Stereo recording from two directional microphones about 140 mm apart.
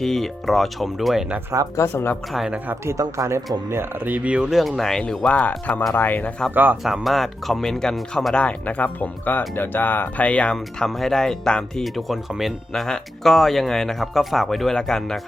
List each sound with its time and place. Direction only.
0.0 s speech: centre (ahead or behind)
1.7 s speech: 20° left (ahead or behind)
2.3 s speech: centre (ahead or behind)
2.6 s speech: 20° right (ahead or behind); by 6.5 s 10° left (ahead or behind)
6.5 s speech: 15° right (ahead or behind)
6.8 s speech: centre (ahead or behind)